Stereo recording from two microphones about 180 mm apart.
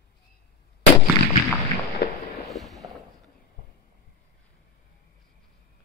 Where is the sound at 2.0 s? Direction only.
60° left (ahead or behind).